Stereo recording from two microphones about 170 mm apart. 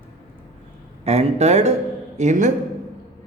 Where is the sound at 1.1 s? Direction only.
40° right (ahead or behind).